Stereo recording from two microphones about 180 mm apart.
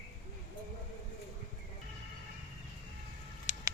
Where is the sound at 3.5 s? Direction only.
40° left (ahead or behind).